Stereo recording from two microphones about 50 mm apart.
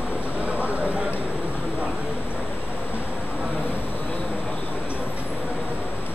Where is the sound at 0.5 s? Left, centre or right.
Right.